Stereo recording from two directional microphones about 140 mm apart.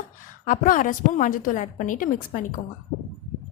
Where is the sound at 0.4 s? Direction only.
70° left (ahead or behind).